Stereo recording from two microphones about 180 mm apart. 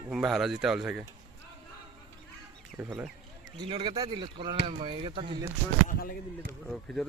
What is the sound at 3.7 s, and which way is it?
Speech, 30° right (ahead or behind).